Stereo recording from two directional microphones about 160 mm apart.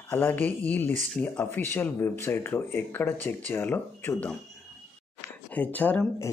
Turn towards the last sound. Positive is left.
turn(degrees=10)  # may be behind; listen again after turning